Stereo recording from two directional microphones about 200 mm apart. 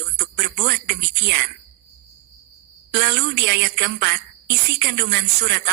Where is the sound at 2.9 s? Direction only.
50° right (ahead or behind).